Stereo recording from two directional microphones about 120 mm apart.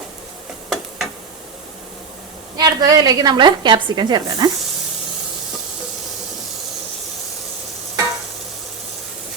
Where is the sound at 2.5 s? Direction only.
30° right (ahead or behind).